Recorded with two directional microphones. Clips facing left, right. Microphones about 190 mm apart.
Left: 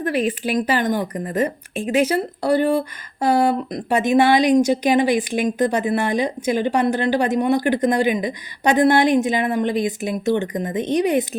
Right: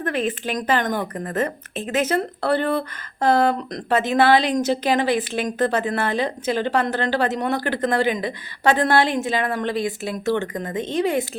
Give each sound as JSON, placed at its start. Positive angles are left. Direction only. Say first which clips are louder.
{"t": 0.0, "sound": "speech", "louder": "left 3 dB", "side_deg": 10}